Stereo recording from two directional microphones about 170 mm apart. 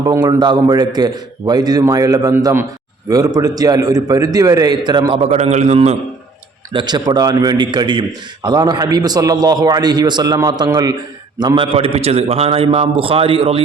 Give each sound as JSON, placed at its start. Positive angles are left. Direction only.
{"t": 0.0, "sound": "a man's voice", "side_deg": -25}
{"t": 6.7, "sound": "a man's voice", "side_deg": -25}